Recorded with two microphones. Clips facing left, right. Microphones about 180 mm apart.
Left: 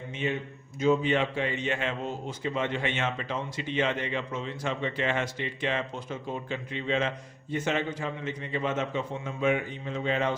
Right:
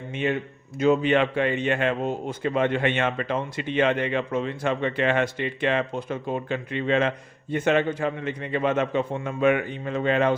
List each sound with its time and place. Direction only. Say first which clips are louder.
0.2 s a man's voice: right 5 dB; 60° right (ahead or behind)